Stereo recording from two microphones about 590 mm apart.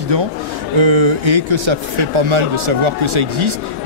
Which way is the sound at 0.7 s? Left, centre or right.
Right.